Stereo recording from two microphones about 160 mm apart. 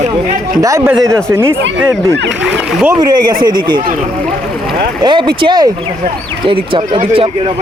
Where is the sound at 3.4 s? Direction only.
25° right (ahead or behind).